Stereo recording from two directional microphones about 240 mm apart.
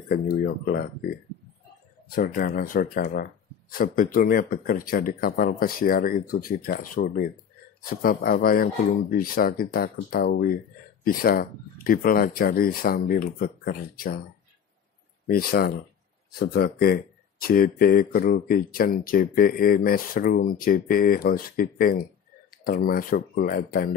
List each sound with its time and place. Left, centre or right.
0.1 s speech: left
15.2 s speech: left